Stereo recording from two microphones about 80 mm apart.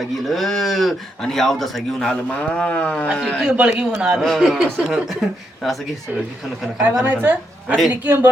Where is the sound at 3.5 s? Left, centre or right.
Centre.